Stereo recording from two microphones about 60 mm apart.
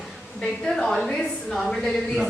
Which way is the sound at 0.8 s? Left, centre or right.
Centre.